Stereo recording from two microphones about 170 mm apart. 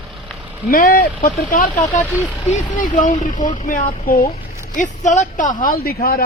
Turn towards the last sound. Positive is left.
turn(degrees=60)  # may be behind; listen again after turning